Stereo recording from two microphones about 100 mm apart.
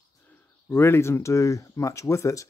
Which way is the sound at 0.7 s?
25° left (ahead or behind).